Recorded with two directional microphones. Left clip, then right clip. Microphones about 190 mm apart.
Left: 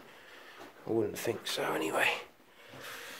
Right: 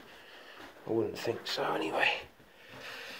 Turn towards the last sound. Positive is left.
turn(degrees=25)  # may be behind; listen again after turning